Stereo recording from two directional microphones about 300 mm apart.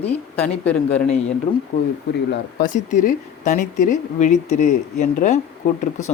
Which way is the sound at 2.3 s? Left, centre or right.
Left.